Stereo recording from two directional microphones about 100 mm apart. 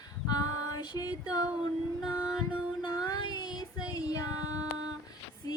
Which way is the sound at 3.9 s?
35° left (ahead or behind).